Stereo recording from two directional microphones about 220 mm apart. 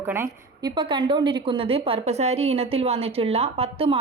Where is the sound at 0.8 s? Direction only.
20° right (ahead or behind).